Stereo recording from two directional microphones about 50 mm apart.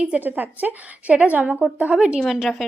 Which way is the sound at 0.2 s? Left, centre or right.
Right.